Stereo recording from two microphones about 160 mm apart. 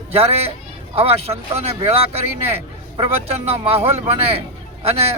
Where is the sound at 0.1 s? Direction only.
40° right (ahead or behind).